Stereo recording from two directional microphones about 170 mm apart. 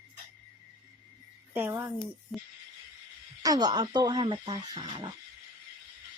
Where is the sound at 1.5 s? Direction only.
10° right (ahead or behind).